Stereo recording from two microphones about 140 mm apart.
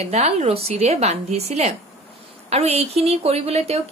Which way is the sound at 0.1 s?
50° right (ahead or behind).